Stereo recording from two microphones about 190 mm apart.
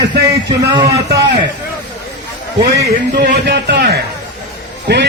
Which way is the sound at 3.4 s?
60° right (ahead or behind).